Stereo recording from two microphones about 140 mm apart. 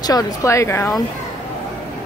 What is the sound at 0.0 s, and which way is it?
Speech, 25° left (ahead or behind).